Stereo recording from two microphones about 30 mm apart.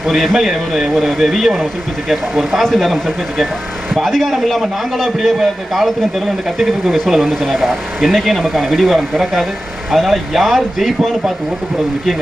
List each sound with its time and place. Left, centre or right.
0.0 s speech: centre
5.4 s speech: centre
6.8 s speech: centre
8.1 s speech: centre
8.4 s speech: centre
10.3 s speech: centre